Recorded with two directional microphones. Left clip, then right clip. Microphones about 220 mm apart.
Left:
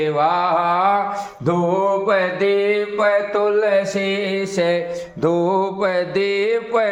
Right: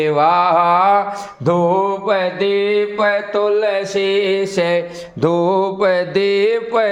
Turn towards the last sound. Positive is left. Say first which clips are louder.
# right 3 dB
turn(degrees=-40)  # may be behind; listen again after turning